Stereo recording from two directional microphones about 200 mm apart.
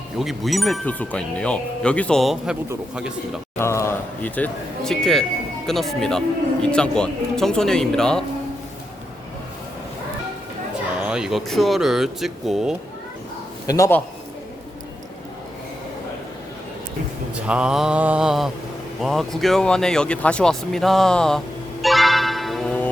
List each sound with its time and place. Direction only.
0.2 s a man's voice: centre (ahead or behind)
3.6 s a man's voice: 15° left (ahead or behind)
11.0 s a man's voice: 5° right (ahead or behind)
13.7 s speech: 15° left (ahead or behind)
17.3 s a man's voice: 5° right (ahead or behind)